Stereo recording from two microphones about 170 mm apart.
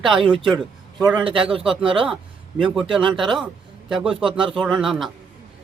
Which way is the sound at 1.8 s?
30° right (ahead or behind).